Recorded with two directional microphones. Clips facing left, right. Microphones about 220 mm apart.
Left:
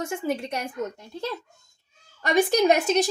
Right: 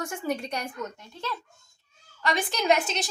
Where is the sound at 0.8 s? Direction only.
40° left (ahead or behind).